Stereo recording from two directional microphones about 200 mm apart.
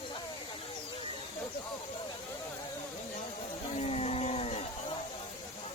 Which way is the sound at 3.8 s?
30° left (ahead or behind).